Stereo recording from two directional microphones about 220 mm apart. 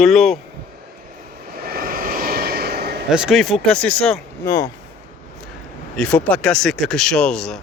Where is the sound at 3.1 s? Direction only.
Centre (ahead or behind); by 4.7 s 15° left (ahead or behind).